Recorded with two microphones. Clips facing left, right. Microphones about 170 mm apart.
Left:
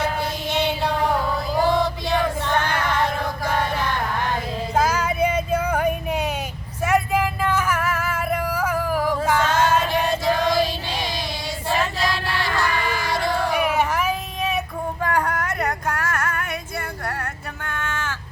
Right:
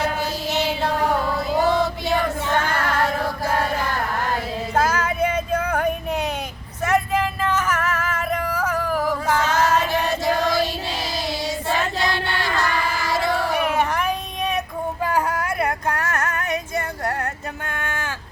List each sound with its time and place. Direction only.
0.5 s chant: 5° right (ahead or behind)
1.6 s female singing: centre (ahead or behind)
4.7 s a sound: 10° left (ahead or behind)
6.8 s vehicle: 10° left (ahead or behind)
9.0 s music: centre (ahead or behind)
9.8 s chant: centre (ahead or behind)
11.7 s child singing: centre (ahead or behind)
15.0 s a sound: 5° right (ahead or behind)
17.7 s a sound: 15° right (ahead or behind)